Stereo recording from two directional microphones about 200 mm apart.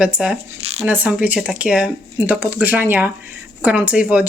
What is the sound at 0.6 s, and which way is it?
Speech, 30° right (ahead or behind).